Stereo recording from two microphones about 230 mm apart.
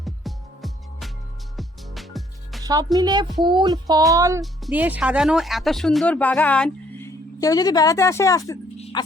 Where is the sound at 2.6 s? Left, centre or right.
Centre.